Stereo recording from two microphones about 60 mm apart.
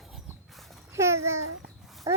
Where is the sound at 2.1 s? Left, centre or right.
Right.